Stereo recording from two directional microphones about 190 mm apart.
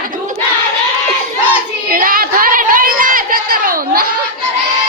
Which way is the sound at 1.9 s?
50° right (ahead or behind).